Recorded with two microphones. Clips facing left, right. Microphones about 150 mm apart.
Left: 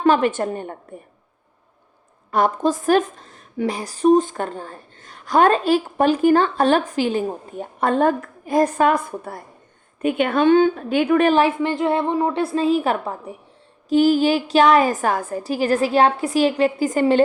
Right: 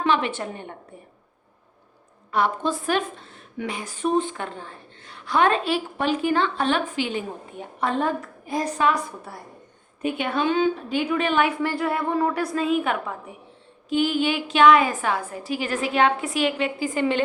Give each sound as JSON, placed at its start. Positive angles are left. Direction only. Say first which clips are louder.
{"t": 0.0, "sound": "a woman's voice", "louder": "left 6 dB", "side_deg": 45}
{"t": 2.3, "sound": "a woman's voice", "louder": "left 5 dB", "side_deg": 45}
{"t": 11.3, "sound": "a woman's voice", "louder": "left 5 dB", "side_deg": 35}
{"t": 11.6, "sound": "a woman's voice", "louder": "left 5 dB", "side_deg": 20}